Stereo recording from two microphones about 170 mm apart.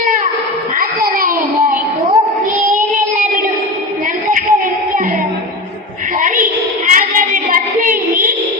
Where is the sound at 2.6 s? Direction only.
50° right (ahead or behind).